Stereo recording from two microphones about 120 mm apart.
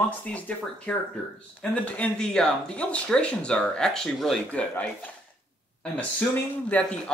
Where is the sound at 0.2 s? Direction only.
10° left (ahead or behind).